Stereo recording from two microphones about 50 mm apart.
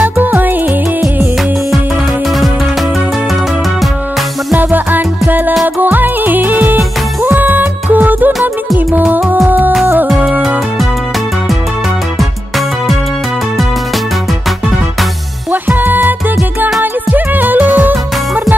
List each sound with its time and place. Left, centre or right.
0.0 s music: right
4.6 s music: right
12.2 s music: centre
15.5 s music: right